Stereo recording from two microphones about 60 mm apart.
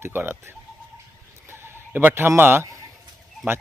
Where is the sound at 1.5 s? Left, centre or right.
Right.